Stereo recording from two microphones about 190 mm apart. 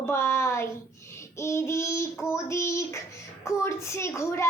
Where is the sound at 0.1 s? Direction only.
15° left (ahead or behind).